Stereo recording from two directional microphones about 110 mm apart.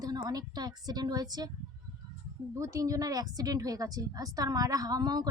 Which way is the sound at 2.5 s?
30° right (ahead or behind).